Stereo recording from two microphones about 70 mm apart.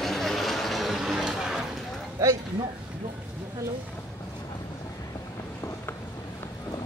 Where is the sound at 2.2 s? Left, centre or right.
Right.